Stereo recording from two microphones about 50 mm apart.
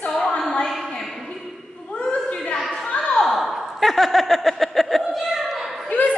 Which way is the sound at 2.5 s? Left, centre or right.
Centre.